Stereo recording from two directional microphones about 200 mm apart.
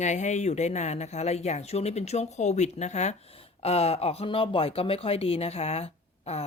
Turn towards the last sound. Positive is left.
turn(degrees=30)  # may be behind; listen again after turning